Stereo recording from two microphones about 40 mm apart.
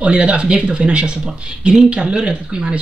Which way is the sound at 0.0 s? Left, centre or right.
Right.